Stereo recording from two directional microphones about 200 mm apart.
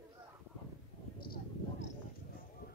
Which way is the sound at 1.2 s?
50° left (ahead or behind).